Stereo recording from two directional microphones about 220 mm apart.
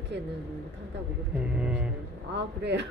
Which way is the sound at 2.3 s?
50° right (ahead or behind).